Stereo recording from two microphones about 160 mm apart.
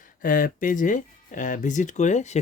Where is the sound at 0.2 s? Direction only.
60° left (ahead or behind).